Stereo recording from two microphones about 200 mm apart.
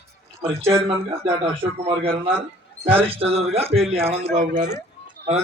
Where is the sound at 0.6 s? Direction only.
10° right (ahead or behind).